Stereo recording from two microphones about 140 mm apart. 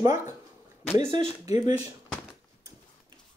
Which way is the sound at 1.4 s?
25° right (ahead or behind).